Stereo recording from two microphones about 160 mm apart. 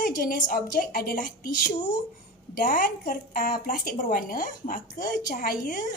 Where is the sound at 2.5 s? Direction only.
60° left (ahead or behind).